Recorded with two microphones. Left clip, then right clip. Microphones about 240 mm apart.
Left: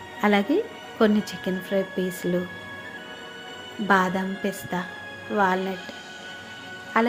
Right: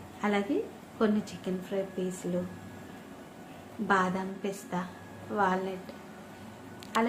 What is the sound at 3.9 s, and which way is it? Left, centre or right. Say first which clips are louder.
A woman's voice: left 6 dB; left.